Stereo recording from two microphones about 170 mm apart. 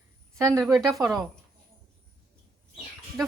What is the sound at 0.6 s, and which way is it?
Speech, centre (ahead or behind).